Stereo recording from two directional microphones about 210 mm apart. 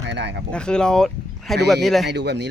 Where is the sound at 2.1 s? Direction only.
55° right (ahead or behind).